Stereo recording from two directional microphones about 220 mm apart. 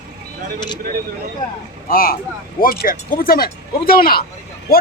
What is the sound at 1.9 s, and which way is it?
A man's voice, 40° left (ahead or behind).